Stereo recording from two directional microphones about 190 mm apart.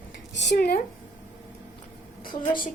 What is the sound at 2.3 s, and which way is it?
Speech, 25° left (ahead or behind).